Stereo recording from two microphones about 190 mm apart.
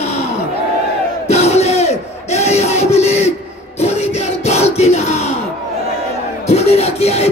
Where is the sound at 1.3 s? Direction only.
35° left (ahead or behind).